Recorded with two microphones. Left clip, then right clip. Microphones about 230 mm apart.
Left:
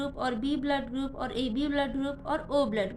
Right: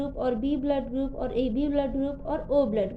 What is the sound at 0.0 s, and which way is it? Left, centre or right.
A woman's voice, centre.